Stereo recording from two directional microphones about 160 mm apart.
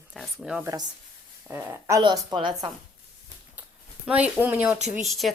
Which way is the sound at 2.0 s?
30° right (ahead or behind).